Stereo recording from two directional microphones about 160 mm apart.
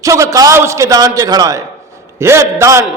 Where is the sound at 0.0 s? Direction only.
20° right (ahead or behind).